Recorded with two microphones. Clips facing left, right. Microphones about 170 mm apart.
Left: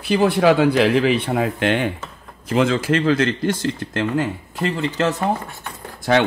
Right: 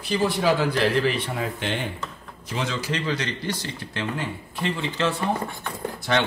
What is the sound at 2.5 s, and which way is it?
Speech, 50° left (ahead or behind).